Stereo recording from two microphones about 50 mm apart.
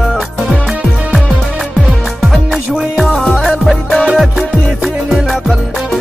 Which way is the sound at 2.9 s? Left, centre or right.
Centre.